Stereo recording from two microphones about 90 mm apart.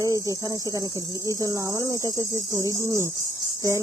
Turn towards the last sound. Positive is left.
turn(degrees=-35)  # may be behind; listen again after turning